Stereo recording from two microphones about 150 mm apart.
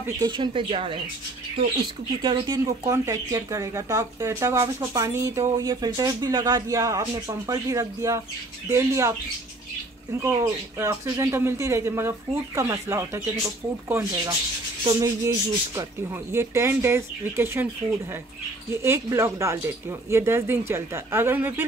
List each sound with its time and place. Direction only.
0.2 s speech: 35° right (ahead or behind)
2.2 s speech: 30° right (ahead or behind)
10.2 s speech: 20° right (ahead or behind)
18.8 s speech: 15° right (ahead or behind)